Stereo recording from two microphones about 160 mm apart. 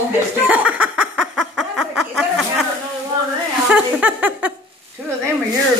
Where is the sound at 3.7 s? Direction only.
10° right (ahead or behind).